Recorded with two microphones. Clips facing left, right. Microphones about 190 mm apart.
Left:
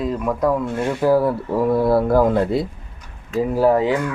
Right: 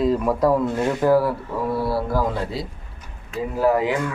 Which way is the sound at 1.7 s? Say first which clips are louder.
Left 7 dB; 50° left (ahead or behind).